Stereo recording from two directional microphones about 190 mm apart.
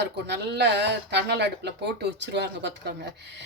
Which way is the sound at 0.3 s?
65° right (ahead or behind).